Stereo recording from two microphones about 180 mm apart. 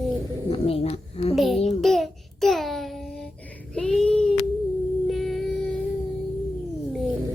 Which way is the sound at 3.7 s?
5° left (ahead or behind).